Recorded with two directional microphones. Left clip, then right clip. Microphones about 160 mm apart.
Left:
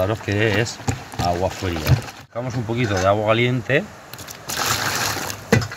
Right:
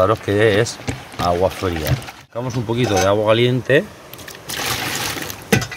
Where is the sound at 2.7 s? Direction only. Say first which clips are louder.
Right 3 dB; 30° right (ahead or behind).